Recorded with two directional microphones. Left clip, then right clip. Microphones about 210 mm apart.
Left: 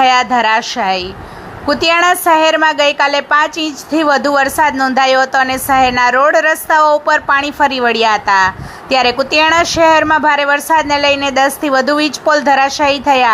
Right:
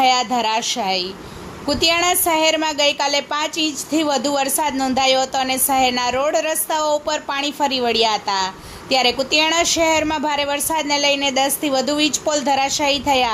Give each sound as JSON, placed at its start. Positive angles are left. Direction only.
{"t": 0.0, "sound": "a woman's voice", "side_deg": 5}